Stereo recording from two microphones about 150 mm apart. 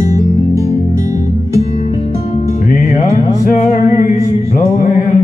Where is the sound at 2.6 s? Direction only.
60° left (ahead or behind).